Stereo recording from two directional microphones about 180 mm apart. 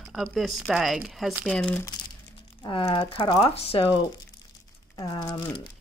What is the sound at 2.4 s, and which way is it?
Speech, 30° left (ahead or behind).